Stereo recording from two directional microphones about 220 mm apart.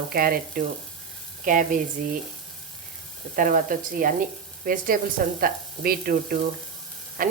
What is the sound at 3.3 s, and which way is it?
Speech, 40° right (ahead or behind).